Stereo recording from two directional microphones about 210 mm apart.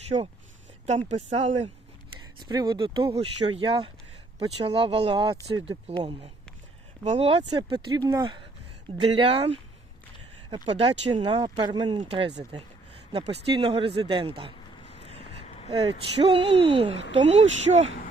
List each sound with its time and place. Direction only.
0.9 s speech: 30° right (ahead or behind)
15.7 s speech: 25° right (ahead or behind)